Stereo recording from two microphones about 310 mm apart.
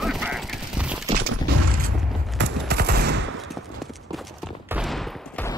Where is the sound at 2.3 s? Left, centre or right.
Right.